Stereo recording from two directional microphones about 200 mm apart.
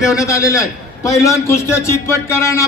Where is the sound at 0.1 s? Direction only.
15° left (ahead or behind).